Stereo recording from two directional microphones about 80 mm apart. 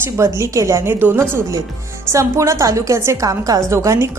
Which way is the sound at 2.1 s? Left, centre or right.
Right.